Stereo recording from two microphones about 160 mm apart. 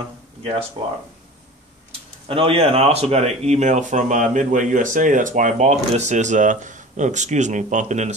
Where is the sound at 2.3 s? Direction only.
35° right (ahead or behind).